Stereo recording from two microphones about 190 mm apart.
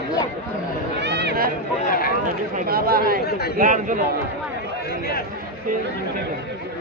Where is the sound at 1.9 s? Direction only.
50° left (ahead or behind).